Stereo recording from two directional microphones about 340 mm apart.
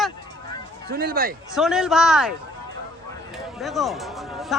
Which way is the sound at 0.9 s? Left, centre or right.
Right.